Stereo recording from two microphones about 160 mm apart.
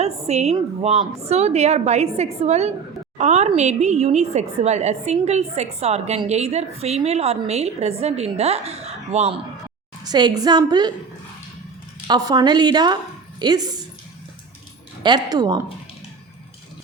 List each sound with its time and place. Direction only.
0.0 s a woman's voice: 40° right (ahead or behind)
10.0 s a woman's voice: 25° right (ahead or behind)
12.0 s a woman's voice: 25° right (ahead or behind)
15.0 s a woman's voice: 25° right (ahead or behind)